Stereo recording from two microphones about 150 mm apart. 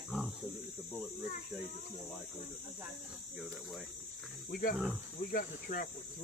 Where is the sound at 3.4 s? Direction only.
Centre (ahead or behind).